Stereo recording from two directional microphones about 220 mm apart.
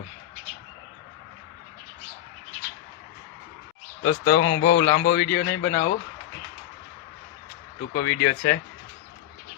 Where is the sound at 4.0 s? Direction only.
55° left (ahead or behind).